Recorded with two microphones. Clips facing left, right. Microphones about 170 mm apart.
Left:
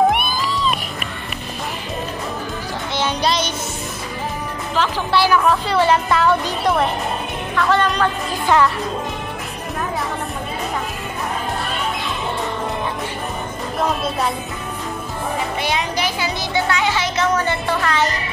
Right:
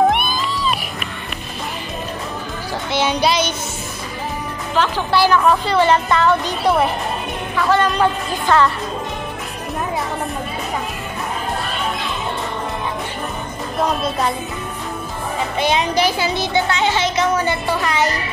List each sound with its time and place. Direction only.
2.9 s music: 10° right (ahead or behind)
4.7 s speech: centre (ahead or behind)
8.5 s speech: 15° left (ahead or behind)
15.6 s music: 25° right (ahead or behind)